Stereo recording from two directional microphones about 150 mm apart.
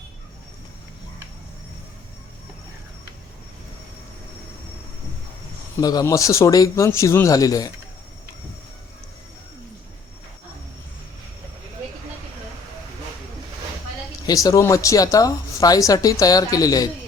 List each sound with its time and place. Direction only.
5.8 s a woman's voice: 25° left (ahead or behind)
14.3 s a woman's voice: 25° left (ahead or behind)